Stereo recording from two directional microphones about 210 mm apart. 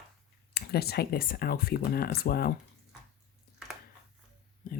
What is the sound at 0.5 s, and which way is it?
Speech, 50° left (ahead or behind).